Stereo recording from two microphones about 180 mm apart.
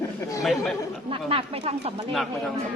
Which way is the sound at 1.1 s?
30° right (ahead or behind).